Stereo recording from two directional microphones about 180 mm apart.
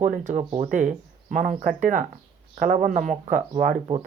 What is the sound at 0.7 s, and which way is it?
Speech, 45° right (ahead or behind).